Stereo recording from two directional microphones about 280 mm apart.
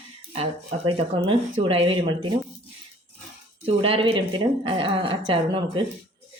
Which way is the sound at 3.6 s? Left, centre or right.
Centre.